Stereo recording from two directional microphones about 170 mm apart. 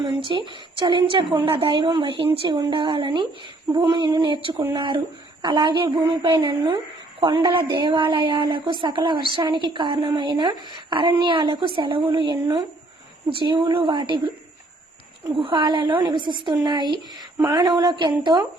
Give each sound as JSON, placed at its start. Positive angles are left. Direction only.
{"t": 0.3, "sound": "speech", "side_deg": -30}
{"t": 15.4, "sound": "speech", "side_deg": -30}